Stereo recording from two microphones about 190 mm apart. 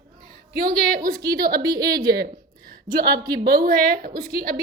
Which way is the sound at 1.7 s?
20° right (ahead or behind).